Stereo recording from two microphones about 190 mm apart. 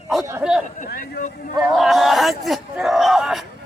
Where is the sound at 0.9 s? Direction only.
50° left (ahead or behind).